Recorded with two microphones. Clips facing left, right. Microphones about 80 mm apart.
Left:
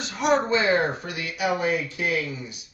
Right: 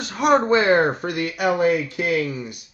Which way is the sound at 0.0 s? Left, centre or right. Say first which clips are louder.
Right 4 dB; right.